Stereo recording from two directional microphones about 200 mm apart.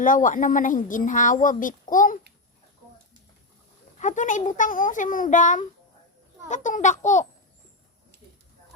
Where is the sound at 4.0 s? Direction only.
40° left (ahead or behind).